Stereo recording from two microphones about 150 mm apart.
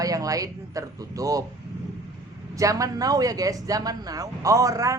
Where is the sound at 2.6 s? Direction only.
20° right (ahead or behind).